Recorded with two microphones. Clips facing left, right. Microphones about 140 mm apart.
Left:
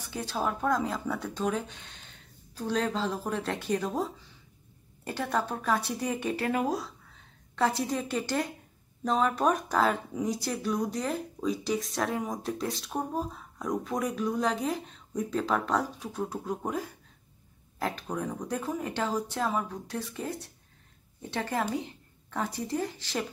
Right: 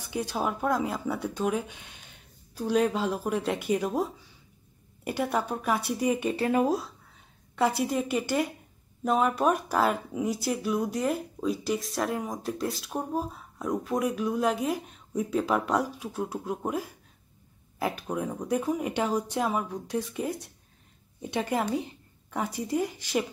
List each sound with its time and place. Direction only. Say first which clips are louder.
0.0 s speech: right 2 dB; 15° right (ahead or behind)